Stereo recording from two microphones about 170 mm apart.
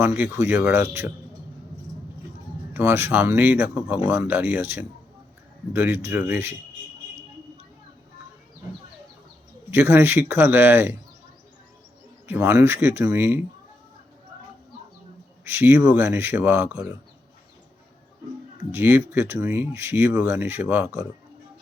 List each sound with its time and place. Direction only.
0.3 s speech: 15° right (ahead or behind)
2.7 s speech: 15° right (ahead or behind)
9.6 s speech: 10° right (ahead or behind)
12.3 s speech: 10° right (ahead or behind)
15.4 s speech: 10° right (ahead or behind)
18.7 s speech: 15° right (ahead or behind)